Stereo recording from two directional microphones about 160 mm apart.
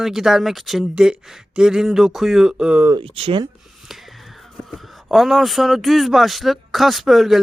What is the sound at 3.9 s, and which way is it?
Speech, centre (ahead or behind).